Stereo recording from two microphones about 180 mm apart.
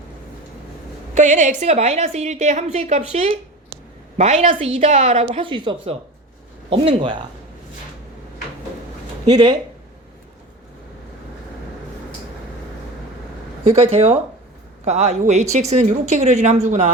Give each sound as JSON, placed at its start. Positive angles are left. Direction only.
{"t": 1.1, "sound": "a woman's voice", "side_deg": -40}
{"t": 9.2, "sound": "speech", "side_deg": -25}
{"t": 13.7, "sound": "a woman's voice", "side_deg": -35}